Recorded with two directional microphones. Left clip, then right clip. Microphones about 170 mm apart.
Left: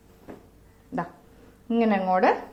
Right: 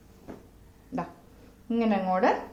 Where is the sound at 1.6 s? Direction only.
30° left (ahead or behind).